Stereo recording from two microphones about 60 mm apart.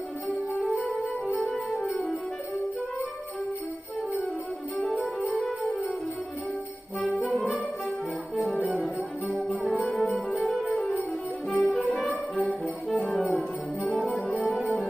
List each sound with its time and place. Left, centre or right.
0.6 s music: centre
4.7 s music: centre
7.0 s music: centre